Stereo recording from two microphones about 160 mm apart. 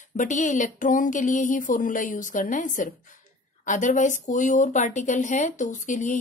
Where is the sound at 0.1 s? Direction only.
55° left (ahead or behind).